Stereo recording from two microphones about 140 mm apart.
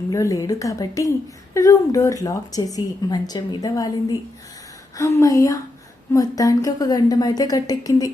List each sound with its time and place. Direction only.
0.1 s a woman's voice: 25° left (ahead or behind)